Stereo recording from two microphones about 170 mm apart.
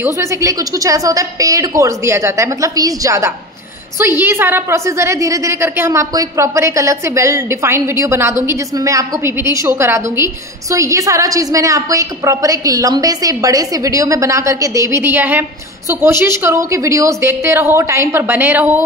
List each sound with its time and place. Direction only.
0.0 s a woman's voice: 15° right (ahead or behind)